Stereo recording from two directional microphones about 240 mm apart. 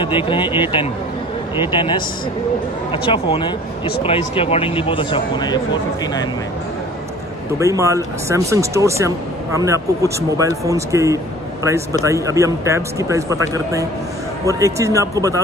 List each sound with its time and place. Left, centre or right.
0.0 s speech: centre
7.5 s speech: centre